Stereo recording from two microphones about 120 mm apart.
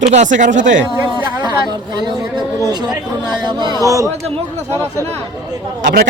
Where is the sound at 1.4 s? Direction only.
35° right (ahead or behind).